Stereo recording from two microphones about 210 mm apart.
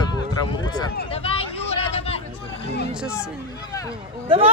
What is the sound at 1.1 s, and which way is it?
Vehicle, 25° left (ahead or behind).